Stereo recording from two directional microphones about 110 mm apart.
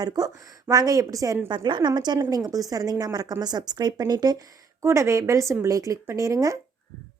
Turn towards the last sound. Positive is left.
turn(degrees=-30)  # may be behind; listen again after turning